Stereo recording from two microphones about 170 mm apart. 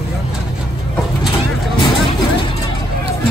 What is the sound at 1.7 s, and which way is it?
Music, 30° left (ahead or behind).